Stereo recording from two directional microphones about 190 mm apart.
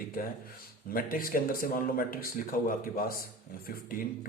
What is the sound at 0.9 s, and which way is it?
A man's voice, 50° left (ahead or behind).